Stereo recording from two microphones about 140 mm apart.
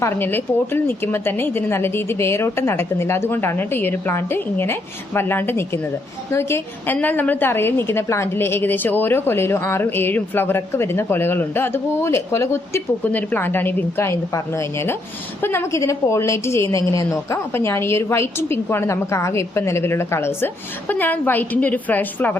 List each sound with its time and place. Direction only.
0.0 s a woman's voice: 15° left (ahead or behind)